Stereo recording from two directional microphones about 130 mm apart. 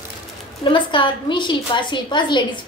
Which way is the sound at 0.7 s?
40° left (ahead or behind).